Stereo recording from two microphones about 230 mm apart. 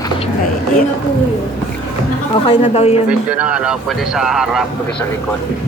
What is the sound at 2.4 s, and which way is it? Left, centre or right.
Speech, left.